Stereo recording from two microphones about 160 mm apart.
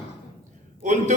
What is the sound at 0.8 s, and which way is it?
Speech, 50° right (ahead or behind).